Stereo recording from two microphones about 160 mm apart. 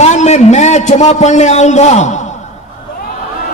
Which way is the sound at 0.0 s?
45° left (ahead or behind).